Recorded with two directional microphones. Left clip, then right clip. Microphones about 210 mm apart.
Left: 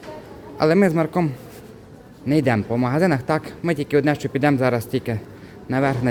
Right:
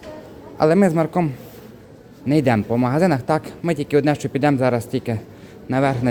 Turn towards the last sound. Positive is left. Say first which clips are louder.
# right 2 dB
turn(degrees=-10)  # may be behind; listen again after turning